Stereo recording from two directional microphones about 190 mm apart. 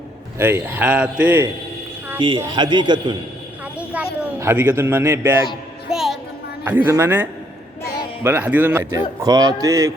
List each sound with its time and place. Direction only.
0.3 s a man's voice: 10° right (ahead or behind)
2.1 s a man's voice: 25° right (ahead or behind)
3.8 s a sound: 10° right (ahead or behind)
5.9 s music: centre (ahead or behind)
6.7 s a man's voice: 10° right (ahead or behind)